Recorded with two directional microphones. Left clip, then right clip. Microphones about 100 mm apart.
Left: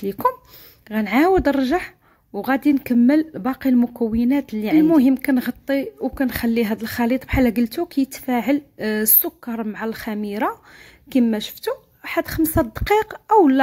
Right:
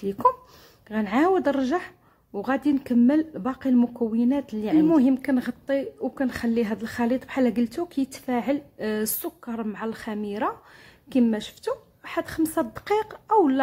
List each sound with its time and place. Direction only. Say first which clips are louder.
0.0 s speech: left 1 dB; 30° left (ahead or behind)
3.7 s speech: left 1 dB; 20° left (ahead or behind); by 13.4 s 45° left (ahead or behind)